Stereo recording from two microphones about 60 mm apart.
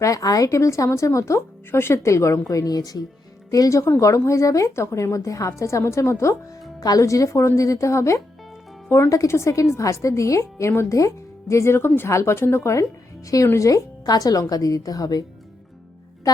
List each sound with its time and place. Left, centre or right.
0.0 s speech: left
6.7 s speech: left
13.5 s a woman's voice: left
16.3 s music: left